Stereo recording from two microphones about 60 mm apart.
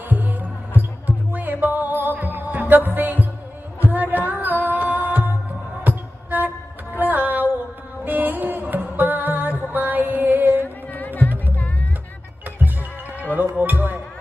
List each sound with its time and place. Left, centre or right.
0.1 s music: right
10.6 s music: left
13.3 s music: right